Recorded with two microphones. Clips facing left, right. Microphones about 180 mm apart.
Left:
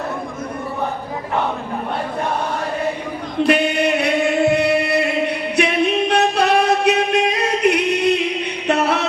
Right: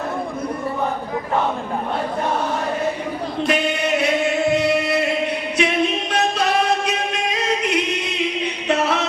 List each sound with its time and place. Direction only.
3.4 s music: 60° left (ahead or behind)